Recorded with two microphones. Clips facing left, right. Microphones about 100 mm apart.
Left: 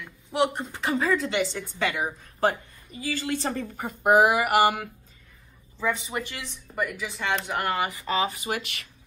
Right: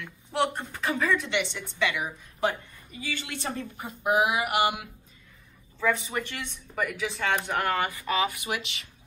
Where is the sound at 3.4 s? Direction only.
50° left (ahead or behind).